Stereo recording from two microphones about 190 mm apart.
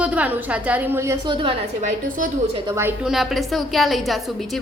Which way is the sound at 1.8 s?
40° right (ahead or behind).